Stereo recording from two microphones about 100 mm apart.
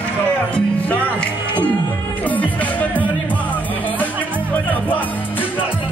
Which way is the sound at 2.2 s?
15° left (ahead or behind).